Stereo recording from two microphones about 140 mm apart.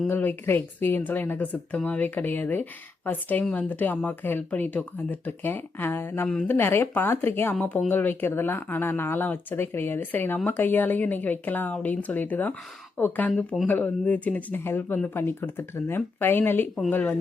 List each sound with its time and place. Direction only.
0.1 s speech: 15° left (ahead or behind)